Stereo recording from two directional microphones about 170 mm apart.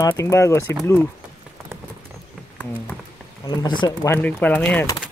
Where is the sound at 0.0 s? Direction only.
15° left (ahead or behind).